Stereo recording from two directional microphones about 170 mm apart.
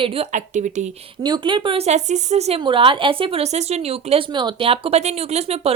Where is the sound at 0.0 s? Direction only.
40° right (ahead or behind).